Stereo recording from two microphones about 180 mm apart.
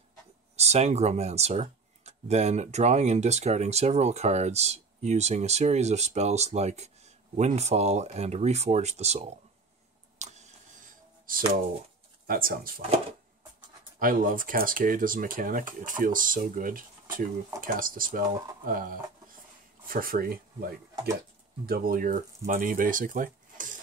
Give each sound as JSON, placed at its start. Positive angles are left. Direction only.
{"t": 0.6, "sound": "speech", "side_deg": -35}
{"t": 10.1, "sound": "a sound", "side_deg": -40}
{"t": 11.3, "sound": "speech", "side_deg": -50}
{"t": 13.9, "sound": "speech", "side_deg": -50}